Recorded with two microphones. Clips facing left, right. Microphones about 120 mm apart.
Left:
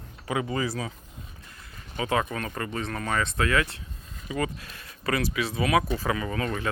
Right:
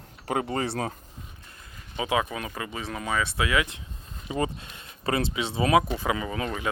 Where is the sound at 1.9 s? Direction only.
15° right (ahead or behind).